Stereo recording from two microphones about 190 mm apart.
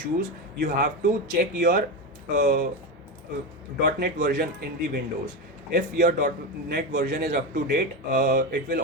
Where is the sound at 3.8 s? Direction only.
55° right (ahead or behind).